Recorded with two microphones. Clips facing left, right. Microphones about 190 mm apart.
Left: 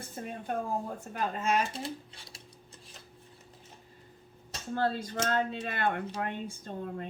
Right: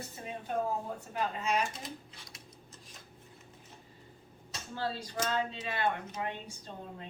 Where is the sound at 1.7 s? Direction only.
30° left (ahead or behind).